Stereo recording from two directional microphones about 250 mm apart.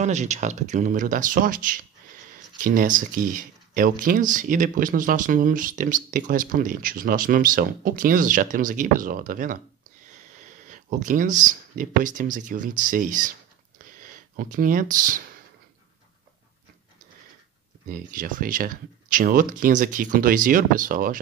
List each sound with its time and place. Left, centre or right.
0.0 s speech: right
10.7 s speech: right
17.8 s speech: right